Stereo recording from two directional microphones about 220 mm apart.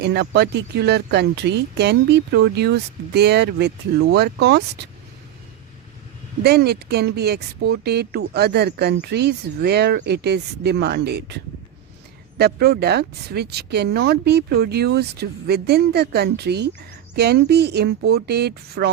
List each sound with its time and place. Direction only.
0.0 s speech: 50° right (ahead or behind)
6.4 s speech: 45° right (ahead or behind)
12.4 s speech: 45° right (ahead or behind)